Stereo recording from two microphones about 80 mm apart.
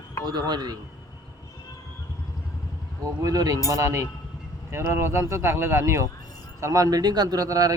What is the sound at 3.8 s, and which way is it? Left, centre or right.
A man's voice, right.